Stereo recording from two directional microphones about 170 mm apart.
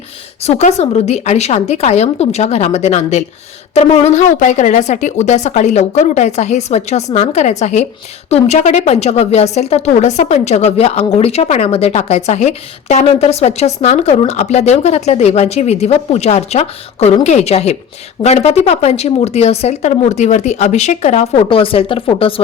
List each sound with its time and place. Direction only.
0.4 s a woman's voice: 40° left (ahead or behind)